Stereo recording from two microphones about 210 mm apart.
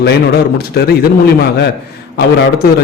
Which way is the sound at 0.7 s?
50° left (ahead or behind).